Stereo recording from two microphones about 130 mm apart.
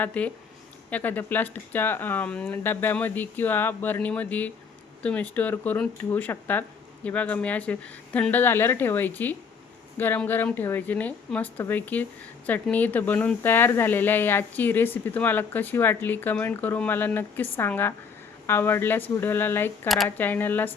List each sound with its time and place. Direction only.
0.0 s speech: 10° left (ahead or behind)